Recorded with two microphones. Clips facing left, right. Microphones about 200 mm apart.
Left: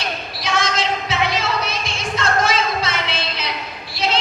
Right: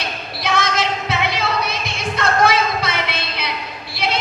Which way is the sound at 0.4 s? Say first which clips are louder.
Right 1 dB; 60° right (ahead or behind).